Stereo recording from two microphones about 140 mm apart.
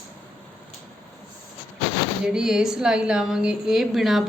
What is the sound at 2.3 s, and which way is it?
A woman's voice, 5° right (ahead or behind).